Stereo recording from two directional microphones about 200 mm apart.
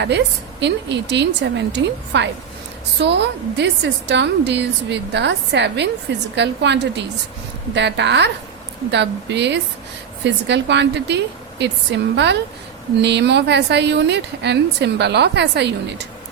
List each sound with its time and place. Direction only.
0.6 s speech: 60° right (ahead or behind)